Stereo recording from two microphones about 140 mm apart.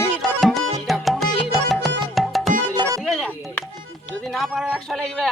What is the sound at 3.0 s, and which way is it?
Speech, centre (ahead or behind).